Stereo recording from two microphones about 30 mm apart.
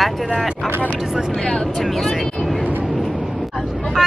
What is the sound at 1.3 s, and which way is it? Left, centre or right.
Speech, left.